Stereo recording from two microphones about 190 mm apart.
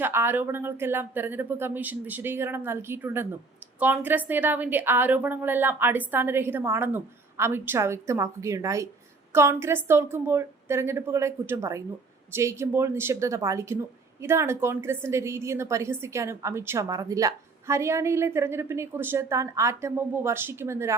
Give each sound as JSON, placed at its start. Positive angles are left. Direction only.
{"t": 0.0, "sound": "a woman's voice", "side_deg": -10}